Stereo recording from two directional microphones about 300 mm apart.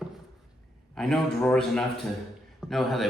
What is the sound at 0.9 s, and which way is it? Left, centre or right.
A man's voice, centre.